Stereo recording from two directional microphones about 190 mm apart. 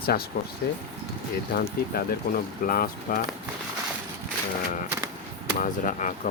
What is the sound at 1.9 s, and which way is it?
Speech, 50° left (ahead or behind).